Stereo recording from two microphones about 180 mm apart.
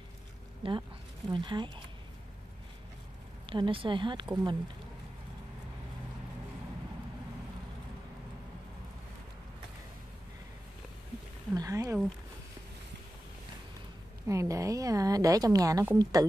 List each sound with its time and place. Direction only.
0.6 s a woman's voice: 30° right (ahead or behind)
3.4 s a woman's voice: 30° right (ahead or behind)
11.5 s a woman's voice: 20° right (ahead or behind)
14.2 s a woman's voice: 15° right (ahead or behind)